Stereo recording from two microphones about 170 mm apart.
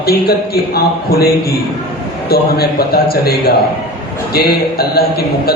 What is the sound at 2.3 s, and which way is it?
A man's voice, 65° left (ahead or behind).